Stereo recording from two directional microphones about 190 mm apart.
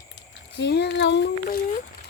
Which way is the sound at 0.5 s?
60° left (ahead or behind).